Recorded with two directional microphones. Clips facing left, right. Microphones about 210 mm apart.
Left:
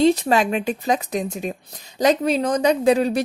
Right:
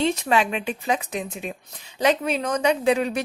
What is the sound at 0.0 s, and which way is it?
A woman's voice, 35° left (ahead or behind).